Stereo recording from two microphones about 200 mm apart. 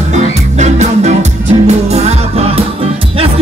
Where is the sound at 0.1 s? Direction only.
35° right (ahead or behind).